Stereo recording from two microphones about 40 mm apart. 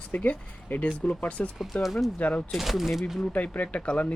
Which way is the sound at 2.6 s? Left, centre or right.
Centre.